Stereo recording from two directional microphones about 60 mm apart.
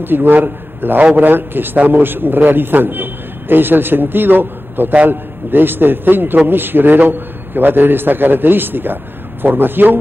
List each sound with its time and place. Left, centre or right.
0.0 s a man's voice: right